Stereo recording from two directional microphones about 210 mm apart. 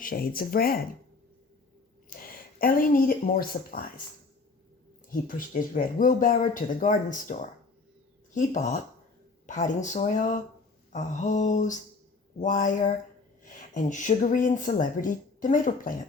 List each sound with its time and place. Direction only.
0.0 s speech: 45° left (ahead or behind)
2.0 s speech: 45° left (ahead or behind)
5.3 s speech: 40° left (ahead or behind)